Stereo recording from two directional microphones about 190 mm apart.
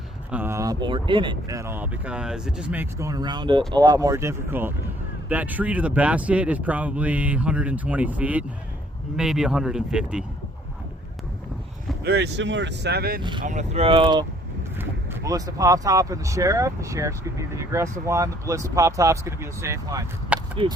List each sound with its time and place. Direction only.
0.3 s speech: 10° right (ahead or behind)
12.0 s speech: 60° right (ahead or behind)
13.4 s speech: 40° right (ahead or behind); by 20.1 s 15° right (ahead or behind)
20.3 s a sound: 5° right (ahead or behind)